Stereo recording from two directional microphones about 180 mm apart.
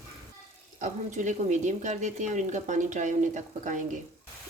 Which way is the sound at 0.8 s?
45° right (ahead or behind).